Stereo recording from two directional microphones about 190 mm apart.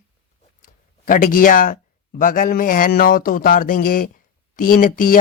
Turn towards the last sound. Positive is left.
turn(degrees=45)  # may be behind; listen again after turning